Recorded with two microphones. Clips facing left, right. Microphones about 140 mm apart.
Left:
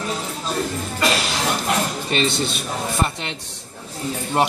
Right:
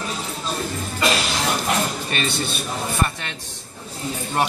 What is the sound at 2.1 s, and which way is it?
Speech, 25° left (ahead or behind).